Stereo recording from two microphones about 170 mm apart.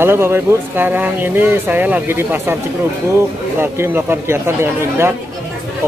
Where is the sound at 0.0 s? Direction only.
15° right (ahead or behind).